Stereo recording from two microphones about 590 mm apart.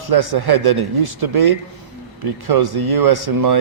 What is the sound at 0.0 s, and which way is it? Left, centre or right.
Speech, right.